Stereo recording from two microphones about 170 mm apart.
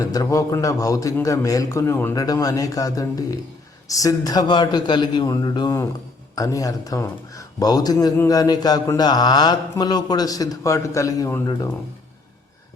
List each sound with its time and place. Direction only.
0.0 s speech: 20° left (ahead or behind)